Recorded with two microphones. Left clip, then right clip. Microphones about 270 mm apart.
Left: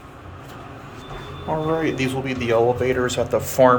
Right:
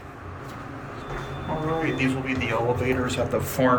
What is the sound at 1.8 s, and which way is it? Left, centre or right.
A man's voice, centre.